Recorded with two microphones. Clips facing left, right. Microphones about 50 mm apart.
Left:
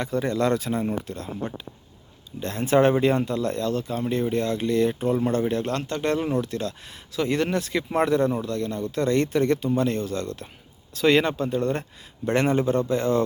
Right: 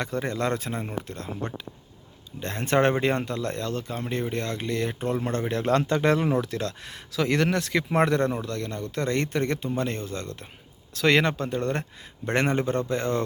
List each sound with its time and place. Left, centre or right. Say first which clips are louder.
0.0 s speech: left 4 dB; right
1.0 s speech: left 2 dB; right
6.1 s speech: even; right
7.9 s speech: left 2 dB; right
9.0 s speech: left 5 dB; right
10.9 s speech: left 2 dB; right